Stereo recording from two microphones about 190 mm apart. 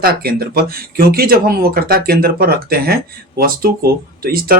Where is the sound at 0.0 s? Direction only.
55° right (ahead or behind).